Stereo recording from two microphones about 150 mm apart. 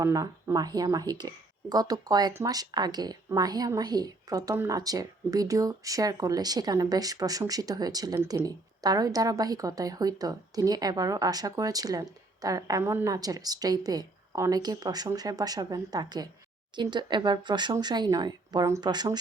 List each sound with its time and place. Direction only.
0.0 s a woman's voice: 20° right (ahead or behind)